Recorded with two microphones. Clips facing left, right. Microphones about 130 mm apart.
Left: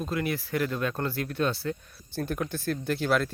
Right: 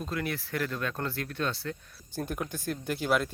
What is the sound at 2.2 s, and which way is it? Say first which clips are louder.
Speech: left 3 dB; 15° right (ahead or behind).